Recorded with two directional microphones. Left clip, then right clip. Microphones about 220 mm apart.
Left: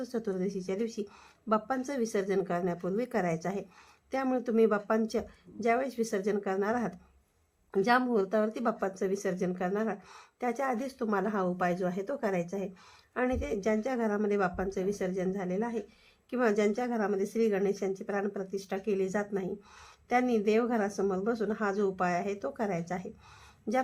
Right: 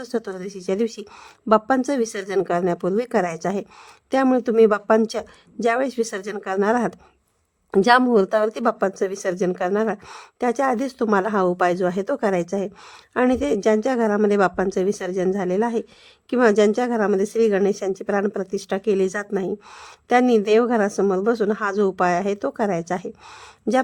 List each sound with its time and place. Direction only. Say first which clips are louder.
0.0 s speech: right 6 dB; 45° right (ahead or behind)